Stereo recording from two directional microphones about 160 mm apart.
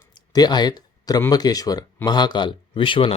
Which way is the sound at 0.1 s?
25° left (ahead or behind).